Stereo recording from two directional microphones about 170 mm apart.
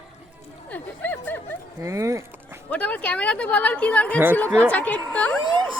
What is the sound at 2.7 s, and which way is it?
A woman's voice, 10° left (ahead or behind).